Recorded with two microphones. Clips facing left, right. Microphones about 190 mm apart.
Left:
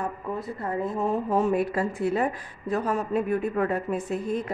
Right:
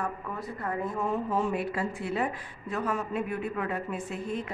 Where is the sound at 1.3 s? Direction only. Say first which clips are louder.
Left 6 dB; 40° left (ahead or behind).